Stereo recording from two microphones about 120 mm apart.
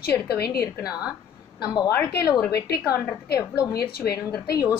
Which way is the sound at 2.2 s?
30° left (ahead or behind).